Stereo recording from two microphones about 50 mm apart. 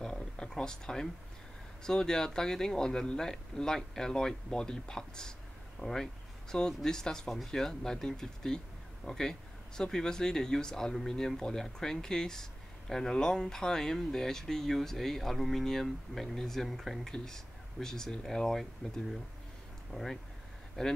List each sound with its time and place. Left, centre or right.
0.0 s a sound: centre
1.9 s speech: centre
5.8 s speech: left
6.5 s speech: centre
19.9 s speech: centre